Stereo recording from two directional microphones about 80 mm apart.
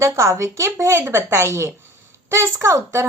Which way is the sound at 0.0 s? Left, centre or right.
Right.